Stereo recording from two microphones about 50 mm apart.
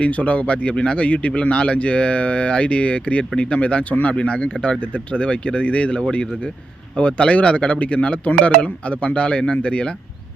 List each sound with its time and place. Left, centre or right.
0.0 s speech: left